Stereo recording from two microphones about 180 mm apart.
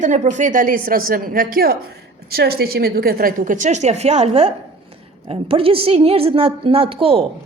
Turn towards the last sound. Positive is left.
turn(degrees=-30)  # may be behind; listen again after turning